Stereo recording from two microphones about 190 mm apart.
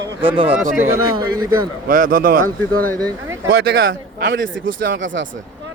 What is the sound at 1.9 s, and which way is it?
Speech, 45° right (ahead or behind).